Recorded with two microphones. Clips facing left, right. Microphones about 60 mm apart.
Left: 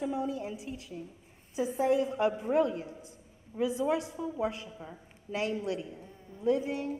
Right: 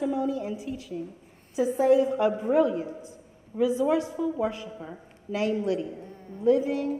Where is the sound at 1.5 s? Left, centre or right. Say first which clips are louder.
Right 7 dB; centre.